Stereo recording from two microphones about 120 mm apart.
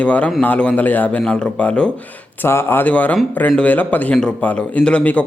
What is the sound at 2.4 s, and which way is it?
A man's voice, 20° left (ahead or behind).